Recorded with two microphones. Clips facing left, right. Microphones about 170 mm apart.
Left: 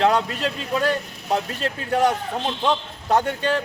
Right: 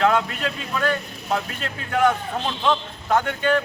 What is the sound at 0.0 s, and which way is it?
Speech, 30° left (ahead or behind).